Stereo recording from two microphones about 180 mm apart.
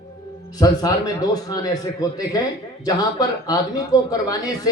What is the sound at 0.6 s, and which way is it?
A man's voice, 20° left (ahead or behind).